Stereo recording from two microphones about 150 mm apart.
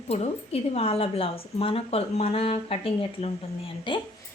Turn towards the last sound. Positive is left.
turn(degrees=35)  # may be behind; listen again after turning